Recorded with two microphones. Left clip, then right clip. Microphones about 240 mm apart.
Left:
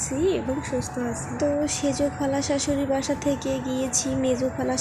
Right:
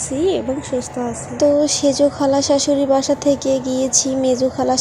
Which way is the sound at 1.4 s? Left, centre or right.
Centre.